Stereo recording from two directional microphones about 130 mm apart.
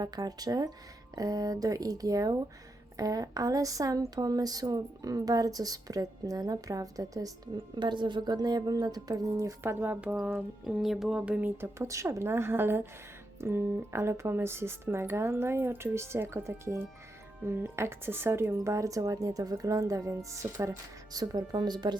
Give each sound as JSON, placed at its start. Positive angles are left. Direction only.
{"t": 0.0, "sound": "a woman's voice", "side_deg": -30}
{"t": 10.6, "sound": "speech", "side_deg": -5}